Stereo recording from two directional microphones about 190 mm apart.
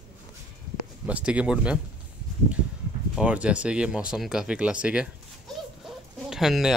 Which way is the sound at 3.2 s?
5° right (ahead or behind).